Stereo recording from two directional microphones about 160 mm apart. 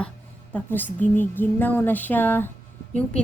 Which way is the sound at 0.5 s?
10° left (ahead or behind).